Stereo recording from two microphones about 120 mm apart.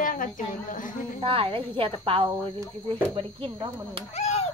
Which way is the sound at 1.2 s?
45° right (ahead or behind).